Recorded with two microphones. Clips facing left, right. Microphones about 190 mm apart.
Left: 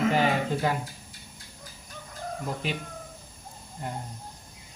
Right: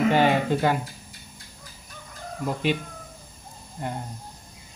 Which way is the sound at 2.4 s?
85° right.